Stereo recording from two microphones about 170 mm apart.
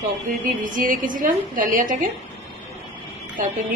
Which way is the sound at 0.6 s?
50° right (ahead or behind).